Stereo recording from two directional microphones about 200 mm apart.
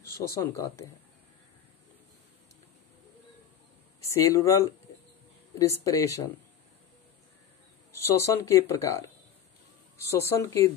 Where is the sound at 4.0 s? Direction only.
15° left (ahead or behind).